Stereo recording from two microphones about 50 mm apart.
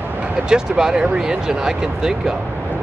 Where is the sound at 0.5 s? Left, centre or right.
Centre.